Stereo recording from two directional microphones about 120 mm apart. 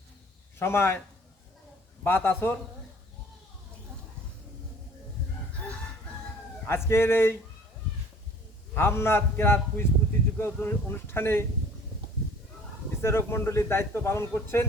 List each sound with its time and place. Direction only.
0.6 s speech: 20° left (ahead or behind)
2.0 s a man's voice: 20° left (ahead or behind)
6.7 s speech: 20° left (ahead or behind)
8.7 s speech: 20° left (ahead or behind)
13.0 s speech: 20° left (ahead or behind)